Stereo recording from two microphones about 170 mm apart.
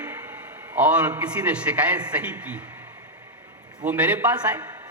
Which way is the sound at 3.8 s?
10° right (ahead or behind).